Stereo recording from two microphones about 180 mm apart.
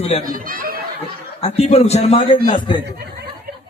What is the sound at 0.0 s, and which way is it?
Speech, 35° left (ahead or behind).